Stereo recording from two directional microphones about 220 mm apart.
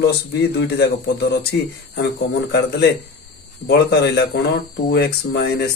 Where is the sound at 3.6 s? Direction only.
50° left (ahead or behind).